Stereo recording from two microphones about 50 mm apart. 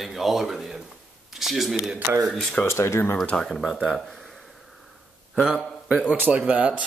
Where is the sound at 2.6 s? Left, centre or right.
Left.